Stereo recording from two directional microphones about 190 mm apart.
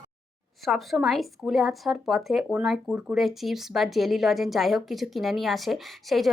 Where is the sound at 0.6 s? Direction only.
Centre (ahead or behind).